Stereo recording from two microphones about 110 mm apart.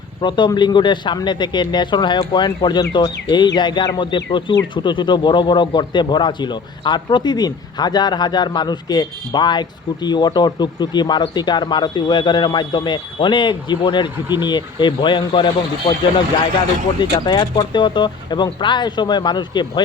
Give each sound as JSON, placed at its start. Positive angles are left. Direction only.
{"t": 0.2, "sound": "a man's voice", "side_deg": 45}
{"t": 17.0, "sound": "a man's voice", "side_deg": 45}